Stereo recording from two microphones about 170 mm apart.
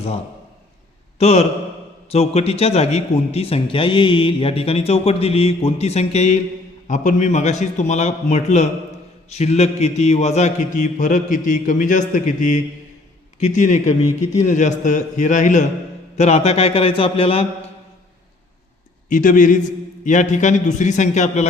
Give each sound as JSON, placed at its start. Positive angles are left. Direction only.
{"t": 1.2, "sound": "a man's voice", "side_deg": 40}
{"t": 19.0, "sound": "a man's voice", "side_deg": 50}